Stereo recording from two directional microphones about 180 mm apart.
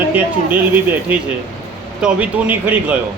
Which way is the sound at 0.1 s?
10° right (ahead or behind).